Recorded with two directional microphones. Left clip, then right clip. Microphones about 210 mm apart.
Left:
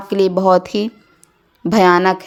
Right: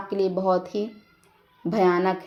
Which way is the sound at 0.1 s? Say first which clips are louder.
Left 10 dB; 40° left (ahead or behind).